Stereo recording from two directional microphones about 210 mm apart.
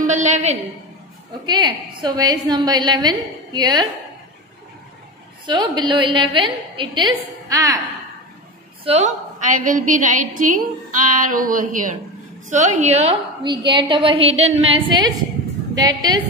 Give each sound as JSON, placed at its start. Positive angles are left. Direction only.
{"t": 0.0, "sound": "a woman's voice", "side_deg": -35}
{"t": 1.4, "sound": "a woman's voice", "side_deg": -20}
{"t": 5.5, "sound": "a woman's voice", "side_deg": -20}
{"t": 8.8, "sound": "a woman's voice", "side_deg": -35}